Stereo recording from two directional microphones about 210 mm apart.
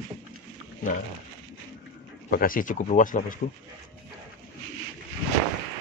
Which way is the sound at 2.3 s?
40° left (ahead or behind).